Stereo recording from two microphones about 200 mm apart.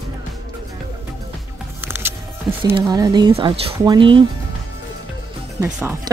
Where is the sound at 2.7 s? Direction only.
20° right (ahead or behind).